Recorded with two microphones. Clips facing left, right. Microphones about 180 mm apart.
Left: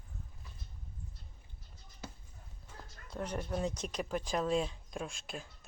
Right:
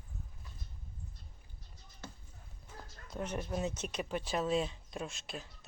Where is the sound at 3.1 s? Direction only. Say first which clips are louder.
Even; 10° right (ahead or behind).